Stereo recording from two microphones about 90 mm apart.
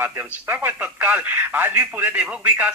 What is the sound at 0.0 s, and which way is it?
A man's voice, 25° right (ahead or behind).